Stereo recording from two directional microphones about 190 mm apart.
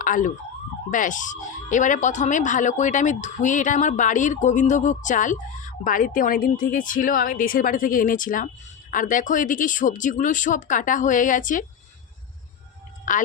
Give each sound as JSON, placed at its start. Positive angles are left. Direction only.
{"t": 0.0, "sound": "speech", "side_deg": 45}
{"t": 13.1, "sound": "speech", "side_deg": 45}